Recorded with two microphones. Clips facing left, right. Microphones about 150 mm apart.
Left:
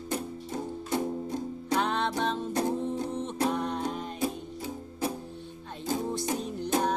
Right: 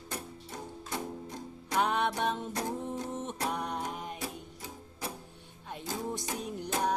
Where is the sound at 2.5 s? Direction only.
25° left (ahead or behind).